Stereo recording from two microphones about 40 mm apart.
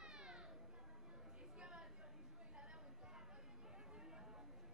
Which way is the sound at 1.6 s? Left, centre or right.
Right.